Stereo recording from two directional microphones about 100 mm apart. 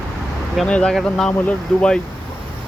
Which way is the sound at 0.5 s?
10° left (ahead or behind).